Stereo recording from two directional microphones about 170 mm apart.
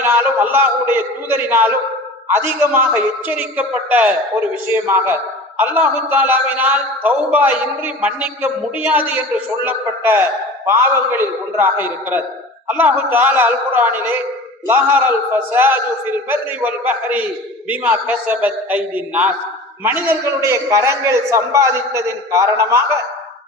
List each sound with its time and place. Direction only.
0.0 s a man's voice: 10° right (ahead or behind)